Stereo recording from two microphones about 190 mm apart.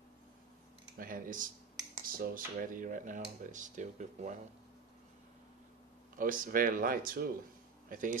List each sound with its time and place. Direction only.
0.9 s speech: 50° right (ahead or behind)
6.1 s speech: 45° right (ahead or behind)